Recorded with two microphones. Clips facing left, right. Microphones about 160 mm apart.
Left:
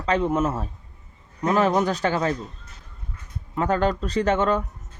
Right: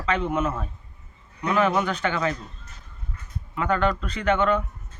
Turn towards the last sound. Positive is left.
turn(degrees=40)  # may be behind; listen again after turning